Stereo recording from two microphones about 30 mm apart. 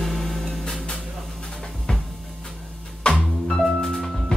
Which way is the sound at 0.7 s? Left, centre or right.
Centre.